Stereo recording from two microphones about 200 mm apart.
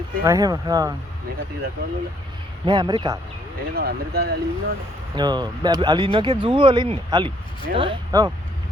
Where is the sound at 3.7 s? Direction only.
50° right (ahead or behind).